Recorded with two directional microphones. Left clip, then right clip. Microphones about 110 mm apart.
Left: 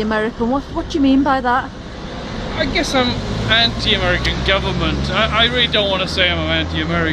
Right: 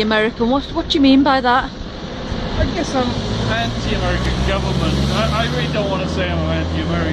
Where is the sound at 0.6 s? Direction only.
10° right (ahead or behind).